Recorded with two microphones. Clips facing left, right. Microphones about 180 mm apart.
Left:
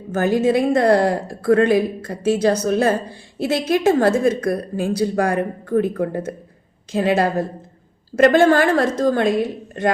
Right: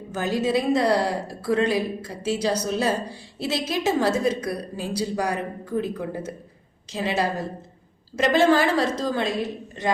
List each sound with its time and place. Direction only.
0.1 s a woman's voice: 50° left (ahead or behind)